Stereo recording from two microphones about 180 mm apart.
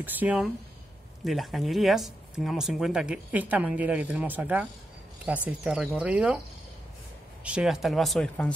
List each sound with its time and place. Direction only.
0.0 s speech: 10° right (ahead or behind)
7.4 s speech: 5° right (ahead or behind)